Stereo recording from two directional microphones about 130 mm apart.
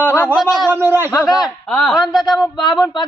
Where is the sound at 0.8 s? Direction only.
15° right (ahead or behind).